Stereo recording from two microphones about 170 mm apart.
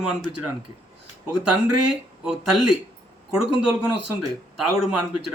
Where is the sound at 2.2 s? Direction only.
5° right (ahead or behind).